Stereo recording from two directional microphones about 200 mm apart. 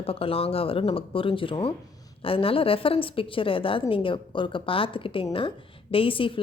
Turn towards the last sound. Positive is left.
turn(degrees=25)  # may be behind; listen again after turning